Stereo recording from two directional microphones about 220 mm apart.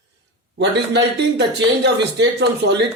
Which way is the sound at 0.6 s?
50° right (ahead or behind).